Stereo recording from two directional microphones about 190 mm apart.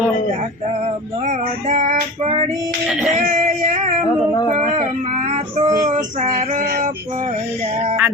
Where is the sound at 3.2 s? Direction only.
40° right (ahead or behind).